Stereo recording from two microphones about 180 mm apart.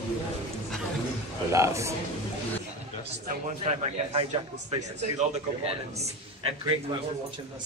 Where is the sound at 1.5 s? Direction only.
15° right (ahead or behind).